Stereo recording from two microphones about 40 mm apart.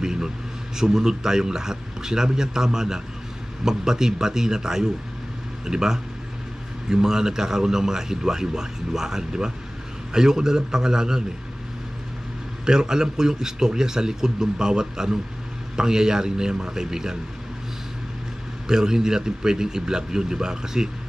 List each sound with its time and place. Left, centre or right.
0.0 s a sound: centre
0.7 s a man's voice: centre
12.6 s a man's voice: centre
18.7 s a man's voice: centre